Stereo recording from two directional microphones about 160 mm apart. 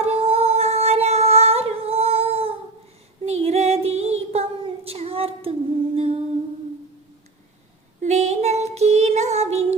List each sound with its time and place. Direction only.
0.0 s humming: 40° right (ahead or behind)
3.2 s female singing: 40° right (ahead or behind)
8.0 s child singing: 45° right (ahead or behind)